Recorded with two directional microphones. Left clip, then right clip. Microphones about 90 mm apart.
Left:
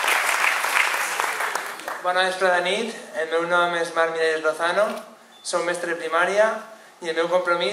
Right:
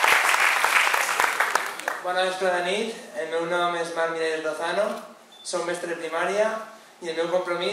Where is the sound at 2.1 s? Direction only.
20° left (ahead or behind).